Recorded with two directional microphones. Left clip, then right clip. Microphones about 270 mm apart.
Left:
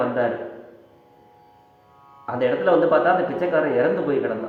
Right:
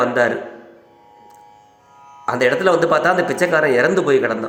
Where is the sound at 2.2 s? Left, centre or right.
Right.